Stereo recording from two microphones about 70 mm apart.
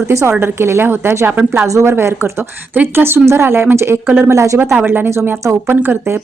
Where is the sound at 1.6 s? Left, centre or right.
Right.